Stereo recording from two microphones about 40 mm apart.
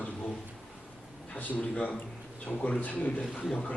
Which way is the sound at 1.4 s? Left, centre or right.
Left.